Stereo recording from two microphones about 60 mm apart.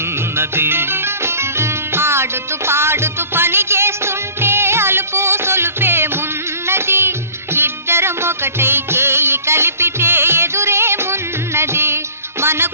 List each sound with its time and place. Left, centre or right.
0.3 s music: right
6.7 s music of bollywood: right
7.5 s music: right